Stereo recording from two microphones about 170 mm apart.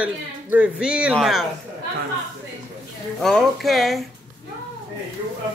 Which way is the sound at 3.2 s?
Centre (ahead or behind).